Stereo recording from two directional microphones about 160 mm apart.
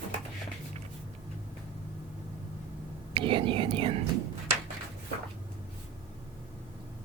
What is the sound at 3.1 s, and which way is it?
Speech, 30° right (ahead or behind).